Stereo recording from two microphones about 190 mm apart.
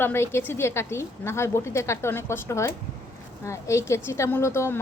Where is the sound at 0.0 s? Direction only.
10° left (ahead or behind).